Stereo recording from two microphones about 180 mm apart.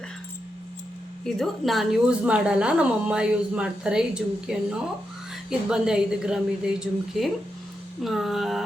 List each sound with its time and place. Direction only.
1.2 s a woman's voice: centre (ahead or behind)